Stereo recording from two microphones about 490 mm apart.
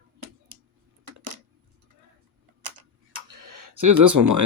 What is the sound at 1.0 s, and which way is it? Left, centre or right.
Coin, right.